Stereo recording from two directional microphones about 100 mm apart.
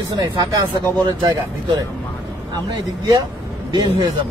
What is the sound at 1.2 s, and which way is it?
Speech, 40° right (ahead or behind).